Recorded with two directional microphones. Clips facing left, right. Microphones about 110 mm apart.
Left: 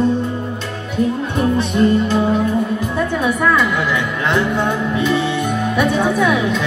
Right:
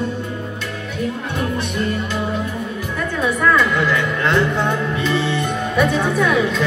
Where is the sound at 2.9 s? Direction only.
10° left (ahead or behind).